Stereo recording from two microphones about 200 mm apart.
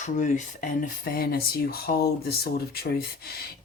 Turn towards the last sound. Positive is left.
turn(degrees=50)  # may be behind; listen again after turning